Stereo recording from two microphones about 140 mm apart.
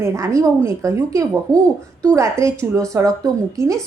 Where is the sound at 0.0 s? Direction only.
20° right (ahead or behind).